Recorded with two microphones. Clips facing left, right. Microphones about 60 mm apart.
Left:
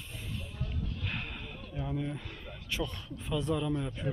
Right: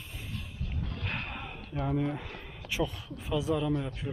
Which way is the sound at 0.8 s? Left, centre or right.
Right.